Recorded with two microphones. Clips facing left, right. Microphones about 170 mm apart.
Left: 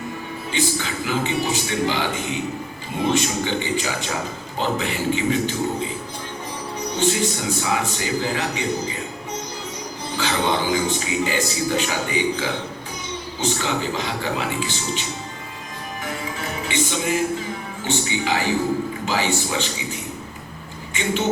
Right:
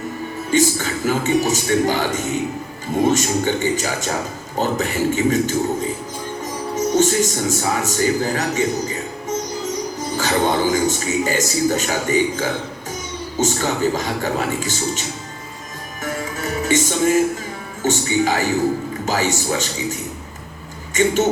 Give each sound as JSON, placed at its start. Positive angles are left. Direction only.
{"t": 0.5, "sound": "a man's voice", "side_deg": -45}
{"t": 6.9, "sound": "a man's voice", "side_deg": -45}
{"t": 10.2, "sound": "a man's voice", "side_deg": -45}
{"t": 16.0, "sound": "music", "side_deg": -45}
{"t": 17.8, "sound": "a man's voice", "side_deg": -45}
{"t": 20.9, "sound": "a man's voice", "side_deg": -45}